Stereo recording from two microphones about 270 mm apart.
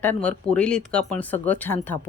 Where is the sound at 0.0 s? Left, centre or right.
Centre.